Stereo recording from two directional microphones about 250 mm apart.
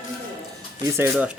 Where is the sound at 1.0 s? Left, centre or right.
Centre.